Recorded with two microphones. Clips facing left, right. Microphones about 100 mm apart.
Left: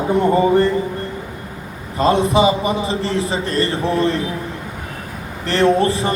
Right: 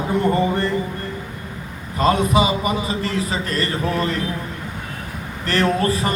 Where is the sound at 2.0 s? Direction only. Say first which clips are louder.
Left 3 dB; 30° left (ahead or behind).